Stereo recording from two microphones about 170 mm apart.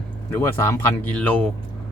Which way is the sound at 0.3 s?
15° left (ahead or behind).